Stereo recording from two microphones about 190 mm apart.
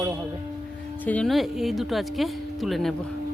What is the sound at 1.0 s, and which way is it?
Speech, 5° left (ahead or behind).